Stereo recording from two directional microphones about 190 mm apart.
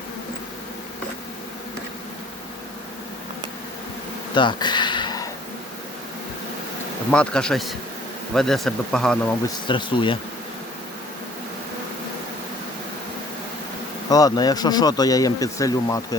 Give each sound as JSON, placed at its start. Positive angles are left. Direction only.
{"t": 4.4, "sound": "a sound", "side_deg": 25}
{"t": 7.1, "sound": "speech", "side_deg": 5}
{"t": 9.6, "sound": "speech", "side_deg": 25}
{"t": 14.1, "sound": "speech", "side_deg": 20}